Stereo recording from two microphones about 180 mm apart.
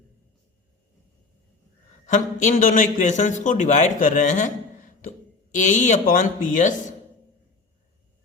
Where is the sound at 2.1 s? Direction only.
45° left (ahead or behind).